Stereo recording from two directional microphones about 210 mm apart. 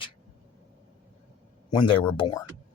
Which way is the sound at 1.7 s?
20° left (ahead or behind).